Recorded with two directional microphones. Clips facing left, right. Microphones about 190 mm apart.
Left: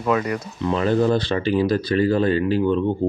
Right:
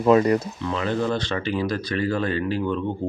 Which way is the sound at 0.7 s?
35° left (ahead or behind).